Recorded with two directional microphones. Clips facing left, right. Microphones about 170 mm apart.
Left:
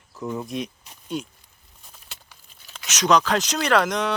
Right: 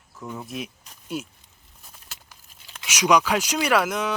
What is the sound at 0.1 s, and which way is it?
Speech, centre (ahead or behind).